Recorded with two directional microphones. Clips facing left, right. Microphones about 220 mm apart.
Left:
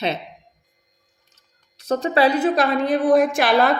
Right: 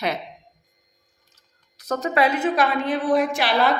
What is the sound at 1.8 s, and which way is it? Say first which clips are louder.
A woman's voice: left 3 dB; 30° left (ahead or behind).